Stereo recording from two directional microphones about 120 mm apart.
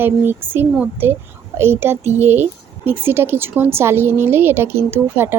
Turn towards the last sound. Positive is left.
turn(degrees=-20)  # may be behind; listen again after turning